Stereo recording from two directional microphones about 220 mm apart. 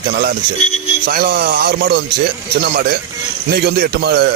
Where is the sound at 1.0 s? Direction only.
45° right (ahead or behind).